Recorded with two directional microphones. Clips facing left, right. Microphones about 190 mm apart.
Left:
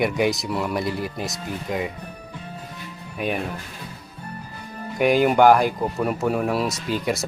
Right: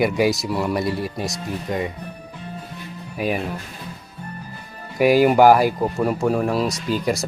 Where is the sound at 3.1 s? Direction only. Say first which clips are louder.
Right 2 dB; 5° right (ahead or behind).